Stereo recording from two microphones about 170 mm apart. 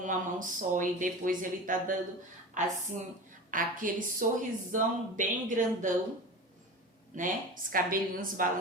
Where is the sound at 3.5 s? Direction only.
50° right (ahead or behind).